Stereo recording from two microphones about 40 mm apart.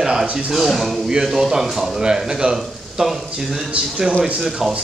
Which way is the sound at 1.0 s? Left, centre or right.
Centre.